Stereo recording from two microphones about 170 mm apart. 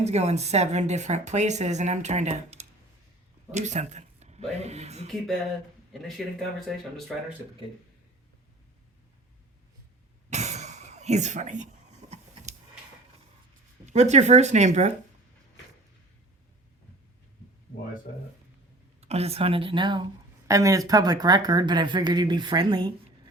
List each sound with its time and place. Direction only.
0.0 s speech: 40° right (ahead or behind)
5.9 s speech: centre (ahead or behind)
10.2 s throat clearing: 40° right (ahead or behind)
13.8 s speech: 40° right (ahead or behind)
18.9 s speech: 40° right (ahead or behind)